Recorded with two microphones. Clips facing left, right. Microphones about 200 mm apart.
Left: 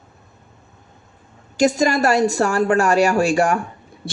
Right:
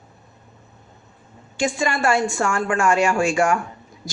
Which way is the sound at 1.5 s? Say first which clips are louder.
Left 6 dB; 40° left (ahead or behind).